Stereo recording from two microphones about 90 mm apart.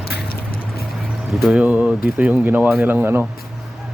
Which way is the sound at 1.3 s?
5° right (ahead or behind).